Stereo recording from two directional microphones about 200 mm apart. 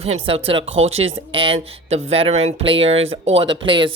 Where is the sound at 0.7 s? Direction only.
80° right.